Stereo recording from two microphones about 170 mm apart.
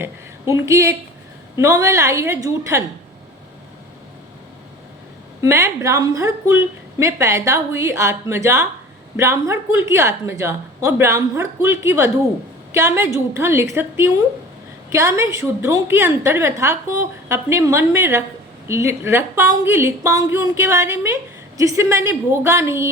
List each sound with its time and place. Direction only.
0.0 s a woman's voice: 15° right (ahead or behind)
5.4 s a woman's voice: 15° right (ahead or behind)